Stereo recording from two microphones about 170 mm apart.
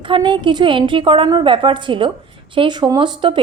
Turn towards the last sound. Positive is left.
turn(degrees=-25)  # may be behind; listen again after turning